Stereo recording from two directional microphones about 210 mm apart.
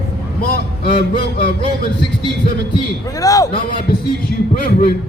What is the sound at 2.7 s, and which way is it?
A man's voice, 15° left (ahead or behind).